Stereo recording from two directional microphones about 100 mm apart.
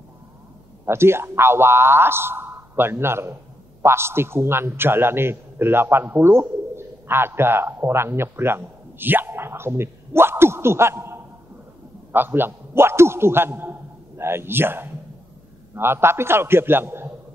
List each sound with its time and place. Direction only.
0.8 s a man's voice: 25° right (ahead or behind)